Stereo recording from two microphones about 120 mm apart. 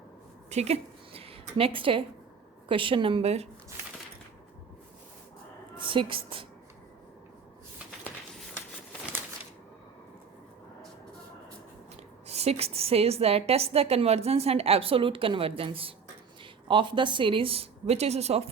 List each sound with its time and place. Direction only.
0.5 s a woman's voice: 60° right (ahead or behind)
3.2 s a woman's voice: 60° right (ahead or behind)
5.8 s a woman's voice: 45° right (ahead or behind)
12.3 s a woman's voice: 60° right (ahead or behind)